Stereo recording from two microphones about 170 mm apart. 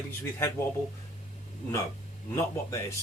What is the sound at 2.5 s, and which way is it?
Speech, 20° left (ahead or behind).